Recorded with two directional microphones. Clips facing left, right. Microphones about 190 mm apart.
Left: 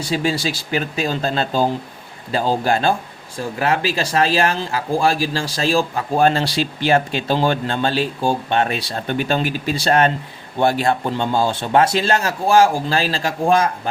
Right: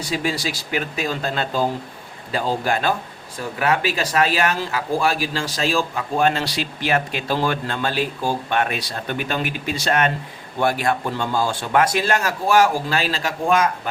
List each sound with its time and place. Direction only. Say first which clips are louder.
0.0 s speech: left 3 dB; 30° left (ahead or behind)